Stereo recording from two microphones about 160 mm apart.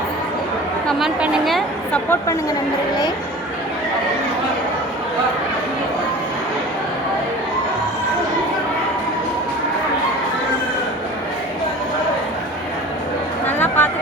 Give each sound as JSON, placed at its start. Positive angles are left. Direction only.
{"t": 0.9, "sound": "a woman's voice", "side_deg": 0}
{"t": 2.0, "sound": "a woman's voice", "side_deg": 15}
{"t": 13.5, "sound": "a sound", "side_deg": 10}